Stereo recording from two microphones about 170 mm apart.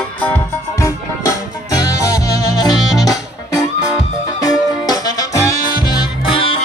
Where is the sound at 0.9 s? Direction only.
20° left (ahead or behind).